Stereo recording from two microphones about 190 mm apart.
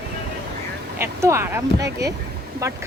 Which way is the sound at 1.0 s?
15° right (ahead or behind).